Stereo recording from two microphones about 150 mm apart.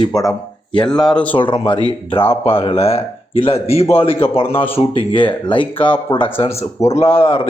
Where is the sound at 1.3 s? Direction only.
35° left (ahead or behind).